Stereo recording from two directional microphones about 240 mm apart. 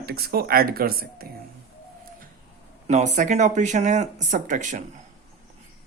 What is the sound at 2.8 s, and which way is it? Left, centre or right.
Speech, right.